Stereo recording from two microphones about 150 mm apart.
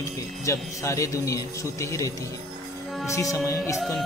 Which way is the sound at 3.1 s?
20° left (ahead or behind).